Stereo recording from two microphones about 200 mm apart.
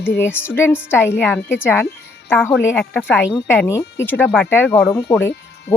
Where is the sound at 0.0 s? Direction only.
10° left (ahead or behind).